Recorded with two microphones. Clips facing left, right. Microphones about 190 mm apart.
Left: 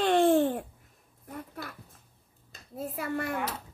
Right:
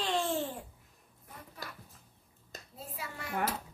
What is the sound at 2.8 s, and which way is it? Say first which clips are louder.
Babbling: left 12 dB; 55° left (ahead or behind).